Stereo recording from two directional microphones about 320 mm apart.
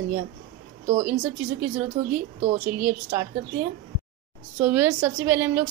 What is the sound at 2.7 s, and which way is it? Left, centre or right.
Speech, centre.